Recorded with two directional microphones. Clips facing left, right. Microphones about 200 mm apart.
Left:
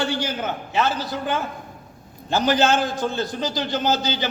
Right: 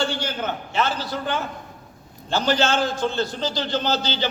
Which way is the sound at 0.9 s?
15° left (ahead or behind).